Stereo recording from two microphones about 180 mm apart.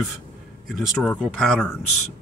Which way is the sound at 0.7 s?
Centre (ahead or behind).